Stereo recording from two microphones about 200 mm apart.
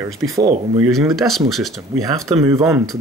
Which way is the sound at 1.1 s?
Centre (ahead or behind).